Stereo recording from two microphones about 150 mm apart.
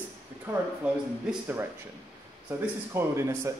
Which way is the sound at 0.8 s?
10° right (ahead or behind).